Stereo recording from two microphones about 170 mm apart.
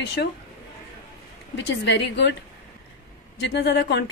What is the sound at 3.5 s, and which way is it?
Speech, 85° left.